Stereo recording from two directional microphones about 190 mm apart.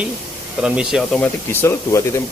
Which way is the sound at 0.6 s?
5° right (ahead or behind).